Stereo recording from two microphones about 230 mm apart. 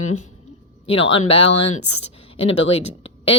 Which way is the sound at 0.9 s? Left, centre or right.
Left.